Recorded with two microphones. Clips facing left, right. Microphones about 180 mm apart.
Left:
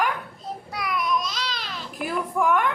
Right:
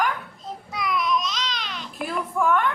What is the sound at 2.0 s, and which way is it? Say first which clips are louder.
Speech: even; 15° left (ahead or behind).